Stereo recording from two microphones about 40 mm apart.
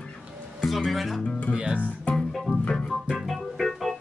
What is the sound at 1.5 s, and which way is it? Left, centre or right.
Speech, right.